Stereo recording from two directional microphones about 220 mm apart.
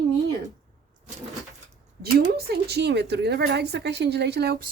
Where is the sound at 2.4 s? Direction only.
45° right (ahead or behind).